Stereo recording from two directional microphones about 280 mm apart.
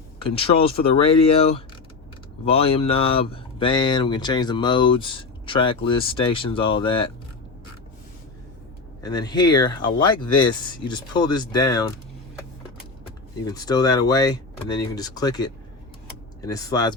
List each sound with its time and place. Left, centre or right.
0.2 s speech: centre
2.4 s speech: left
9.0 s speech: centre
13.4 s speech: centre